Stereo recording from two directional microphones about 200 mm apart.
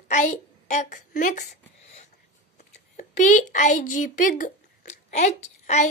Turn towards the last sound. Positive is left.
turn(degrees=35)  # may be behind; listen again after turning